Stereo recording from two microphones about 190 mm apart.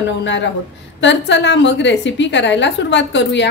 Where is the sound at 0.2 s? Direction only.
70° left (ahead or behind).